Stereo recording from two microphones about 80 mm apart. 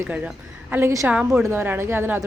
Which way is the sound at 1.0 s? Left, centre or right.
Centre.